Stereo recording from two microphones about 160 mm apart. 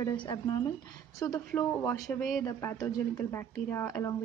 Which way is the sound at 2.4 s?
20° left (ahead or behind).